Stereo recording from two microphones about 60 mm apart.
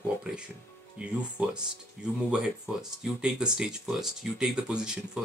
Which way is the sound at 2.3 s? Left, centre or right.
Centre.